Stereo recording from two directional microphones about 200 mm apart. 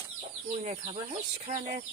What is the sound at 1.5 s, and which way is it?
Chicken, 35° right (ahead or behind).